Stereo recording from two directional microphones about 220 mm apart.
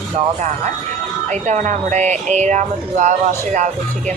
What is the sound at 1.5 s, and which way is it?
Speech, 30° right (ahead or behind).